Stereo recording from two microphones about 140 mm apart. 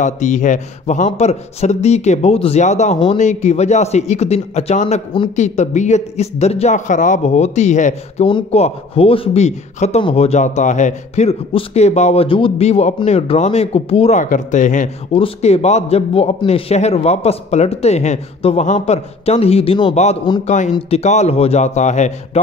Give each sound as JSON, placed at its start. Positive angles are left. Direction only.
{"t": 0.0, "sound": "a man's voice", "side_deg": 60}
{"t": 8.3, "sound": "speech", "side_deg": 40}
{"t": 14.2, "sound": "a man's voice", "side_deg": 65}
{"t": 15.1, "sound": "speech", "side_deg": 45}
{"t": 20.4, "sound": "a man's voice", "side_deg": 60}